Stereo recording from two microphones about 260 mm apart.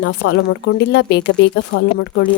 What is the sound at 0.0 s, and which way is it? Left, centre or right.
Speech, left.